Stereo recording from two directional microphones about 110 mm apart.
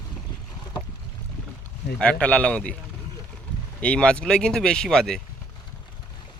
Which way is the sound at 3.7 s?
10° left (ahead or behind).